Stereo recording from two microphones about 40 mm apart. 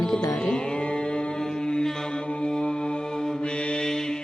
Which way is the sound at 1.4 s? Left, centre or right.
Centre.